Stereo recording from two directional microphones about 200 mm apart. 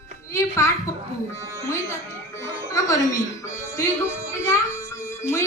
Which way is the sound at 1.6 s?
15° left (ahead or behind).